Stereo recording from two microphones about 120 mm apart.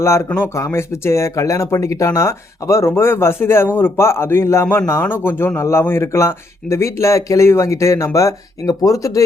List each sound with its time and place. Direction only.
0.0 s speech: 20° left (ahead or behind)